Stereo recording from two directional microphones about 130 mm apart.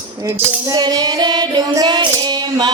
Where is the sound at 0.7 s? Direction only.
30° right (ahead or behind).